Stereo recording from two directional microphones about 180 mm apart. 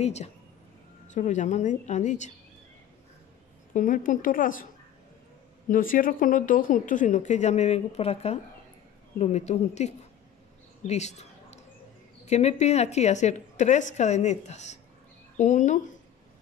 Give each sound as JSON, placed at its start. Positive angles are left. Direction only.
{"t": 0.0, "sound": "a woman's voice", "side_deg": 40}
{"t": 3.7, "sound": "speech", "side_deg": 45}
{"t": 5.7, "sound": "a woman's voice", "side_deg": 50}
{"t": 10.9, "sound": "a sound", "side_deg": 40}
{"t": 12.3, "sound": "a woman's voice", "side_deg": 40}